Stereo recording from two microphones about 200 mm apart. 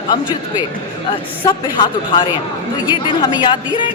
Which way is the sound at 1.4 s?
20° left (ahead or behind).